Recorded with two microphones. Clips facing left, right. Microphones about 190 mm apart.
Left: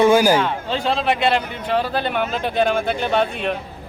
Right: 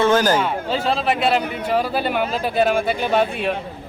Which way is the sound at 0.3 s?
5° right (ahead or behind).